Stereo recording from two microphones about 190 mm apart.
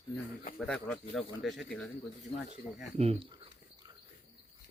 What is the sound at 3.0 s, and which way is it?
Speech, 30° right (ahead or behind).